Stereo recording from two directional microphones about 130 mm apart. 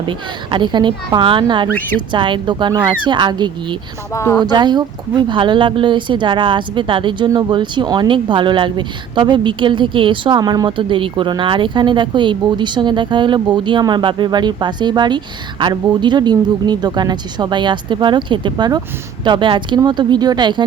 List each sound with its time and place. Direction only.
0.0 s speech: 40° right (ahead or behind)
4.1 s speech: 20° left (ahead or behind)
4.4 s speech: 35° right (ahead or behind)